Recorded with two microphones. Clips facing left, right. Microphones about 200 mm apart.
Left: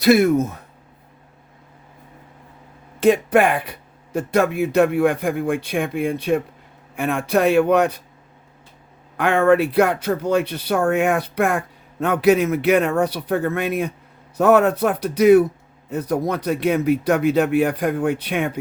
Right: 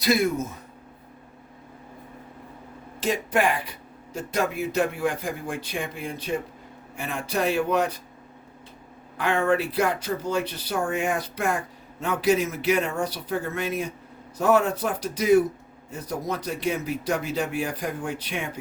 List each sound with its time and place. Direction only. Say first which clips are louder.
0.0 s speech: left 8 dB; 65° left (ahead or behind)
3.0 s speech: left 9 dB; 60° left (ahead or behind)
9.1 s speech: left 7 dB; 60° left (ahead or behind)